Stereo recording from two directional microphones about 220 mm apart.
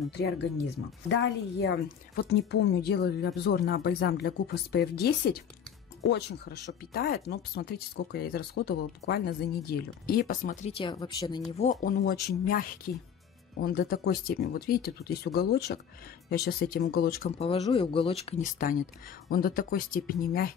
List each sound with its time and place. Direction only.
0.1 s speech: 50° left (ahead or behind); by 11.6 s 20° left (ahead or behind)
11.6 s speech: 35° left (ahead or behind)
17.4 s speech: 25° left (ahead or behind); by 20.5 s 40° left (ahead or behind)